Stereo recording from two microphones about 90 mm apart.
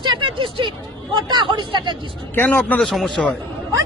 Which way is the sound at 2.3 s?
20° left (ahead or behind).